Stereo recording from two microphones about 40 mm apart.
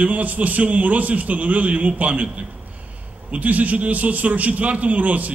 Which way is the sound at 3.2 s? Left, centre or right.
Right.